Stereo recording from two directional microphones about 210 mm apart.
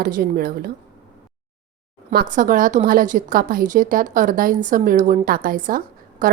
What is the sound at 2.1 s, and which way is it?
A woman's voice, 40° right (ahead or behind).